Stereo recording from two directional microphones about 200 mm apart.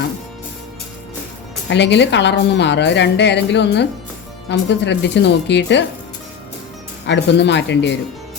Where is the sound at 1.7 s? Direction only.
60° left (ahead or behind).